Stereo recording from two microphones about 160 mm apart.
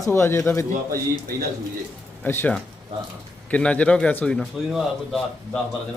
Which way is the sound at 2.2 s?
10° left (ahead or behind).